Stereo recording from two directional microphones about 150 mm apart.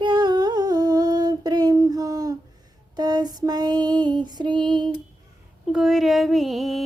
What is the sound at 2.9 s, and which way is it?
Female singing, 25° right (ahead or behind).